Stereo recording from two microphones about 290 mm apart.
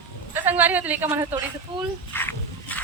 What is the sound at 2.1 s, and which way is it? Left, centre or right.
Pig, centre.